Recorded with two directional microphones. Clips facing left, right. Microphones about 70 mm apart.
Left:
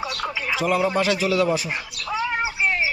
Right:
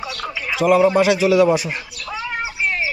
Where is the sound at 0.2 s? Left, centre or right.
Centre.